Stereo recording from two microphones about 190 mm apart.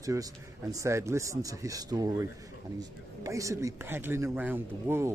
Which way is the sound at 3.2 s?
15° right (ahead or behind).